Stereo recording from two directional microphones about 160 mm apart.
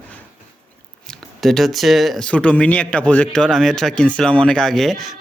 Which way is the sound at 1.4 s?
Centre (ahead or behind).